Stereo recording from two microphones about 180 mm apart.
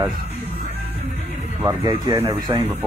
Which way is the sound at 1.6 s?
20° right (ahead or behind).